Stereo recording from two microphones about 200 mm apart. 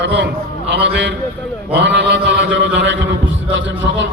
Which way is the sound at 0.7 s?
60° right (ahead or behind).